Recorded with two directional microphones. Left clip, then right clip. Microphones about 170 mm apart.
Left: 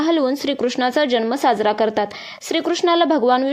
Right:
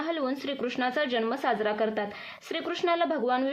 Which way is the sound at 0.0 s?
50° left (ahead or behind).